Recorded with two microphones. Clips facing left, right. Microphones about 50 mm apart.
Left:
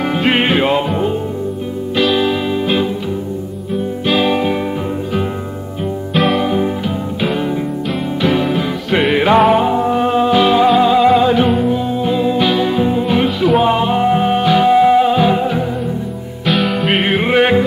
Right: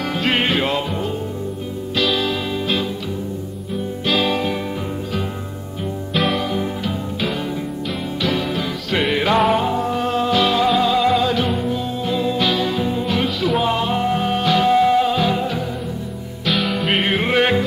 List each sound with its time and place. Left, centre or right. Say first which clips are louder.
0.0 s music: left 5 dB; centre
4.0 s music: left 4 dB; centre
6.1 s music: left 5 dB; centre
6.4 s music: left 6 dB; centre
16.4 s music: left 5 dB; centre